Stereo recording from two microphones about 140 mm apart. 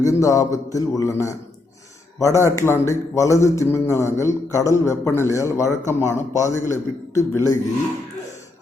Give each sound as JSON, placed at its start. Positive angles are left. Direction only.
{"t": 0.0, "sound": "speech", "side_deg": 25}